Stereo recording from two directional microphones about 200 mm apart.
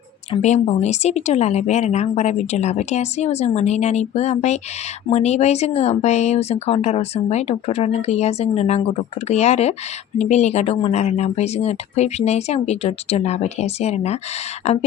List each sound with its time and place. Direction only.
0.3 s speech: 35° left (ahead or behind)